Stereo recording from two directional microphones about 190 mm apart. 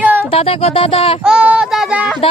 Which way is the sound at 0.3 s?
30° left (ahead or behind).